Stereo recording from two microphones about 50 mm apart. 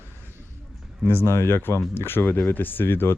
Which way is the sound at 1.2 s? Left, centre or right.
Left.